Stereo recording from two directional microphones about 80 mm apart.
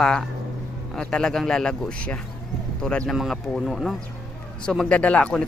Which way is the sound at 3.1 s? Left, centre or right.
Centre.